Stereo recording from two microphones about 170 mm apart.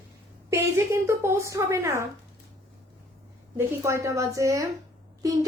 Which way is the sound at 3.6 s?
15° right (ahead or behind).